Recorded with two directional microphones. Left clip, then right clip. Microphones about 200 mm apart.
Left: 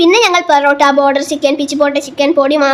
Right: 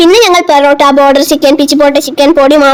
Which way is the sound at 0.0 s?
35° right (ahead or behind).